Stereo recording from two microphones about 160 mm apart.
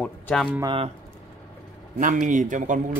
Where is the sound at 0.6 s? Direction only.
35° right (ahead or behind).